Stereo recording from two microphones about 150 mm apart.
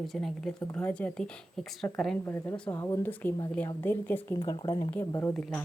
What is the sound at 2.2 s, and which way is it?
Speech, 15° left (ahead or behind).